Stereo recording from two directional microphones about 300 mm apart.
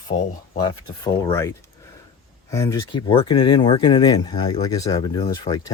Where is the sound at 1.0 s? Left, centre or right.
Centre.